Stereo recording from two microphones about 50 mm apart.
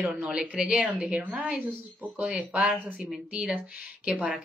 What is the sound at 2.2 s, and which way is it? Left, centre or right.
Speech, right.